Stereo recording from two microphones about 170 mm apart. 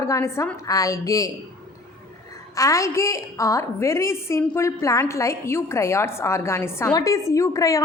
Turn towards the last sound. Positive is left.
turn(degrees=20)  # may be behind; listen again after turning